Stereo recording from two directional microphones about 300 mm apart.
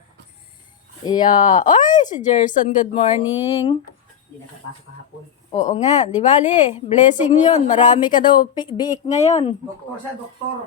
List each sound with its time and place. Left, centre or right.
1.0 s speech: centre
1.9 s speech: left
5.5 s speech: left
9.0 s speech: left